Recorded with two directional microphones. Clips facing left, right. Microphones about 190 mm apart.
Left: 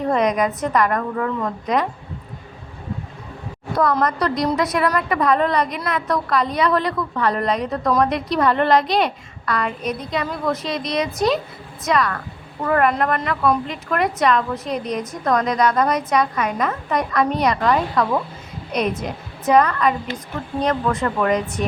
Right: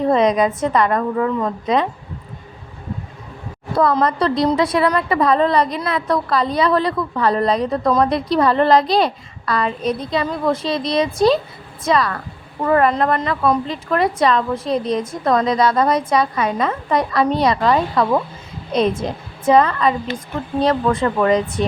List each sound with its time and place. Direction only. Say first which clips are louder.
0.1 s a woman's voice: right 3 dB; 25° right (ahead or behind)
3.8 s a woman's voice: right 3 dB; 30° right (ahead or behind)